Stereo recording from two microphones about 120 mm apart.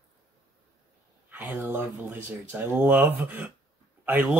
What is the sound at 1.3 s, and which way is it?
Speech, 15° right (ahead or behind).